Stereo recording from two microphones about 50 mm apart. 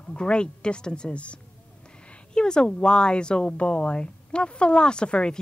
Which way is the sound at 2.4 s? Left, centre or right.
Centre.